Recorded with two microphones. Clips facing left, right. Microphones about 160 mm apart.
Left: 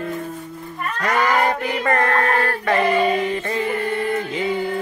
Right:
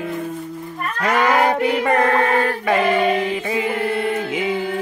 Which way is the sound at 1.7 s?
10° right (ahead or behind).